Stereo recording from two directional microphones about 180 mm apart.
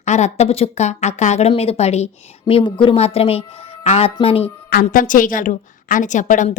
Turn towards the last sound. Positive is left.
turn(degrees=45)  # may be behind; listen again after turning